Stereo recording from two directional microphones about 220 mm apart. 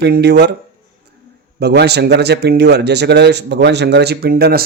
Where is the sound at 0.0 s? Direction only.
50° right (ahead or behind).